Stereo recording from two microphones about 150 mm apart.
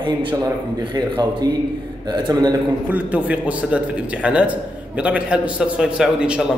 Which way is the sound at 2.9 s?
10° right (ahead or behind).